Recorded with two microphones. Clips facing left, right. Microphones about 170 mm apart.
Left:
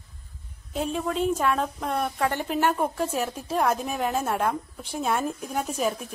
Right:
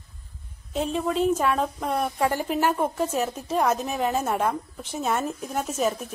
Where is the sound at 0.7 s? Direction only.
5° left (ahead or behind).